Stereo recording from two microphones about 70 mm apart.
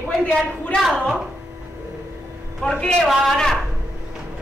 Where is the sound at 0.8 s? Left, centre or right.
Centre.